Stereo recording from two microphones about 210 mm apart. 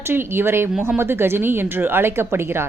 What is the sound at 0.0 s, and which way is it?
Speech, 10° right (ahead or behind).